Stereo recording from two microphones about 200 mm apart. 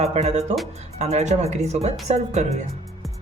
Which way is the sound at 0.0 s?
35° right (ahead or behind).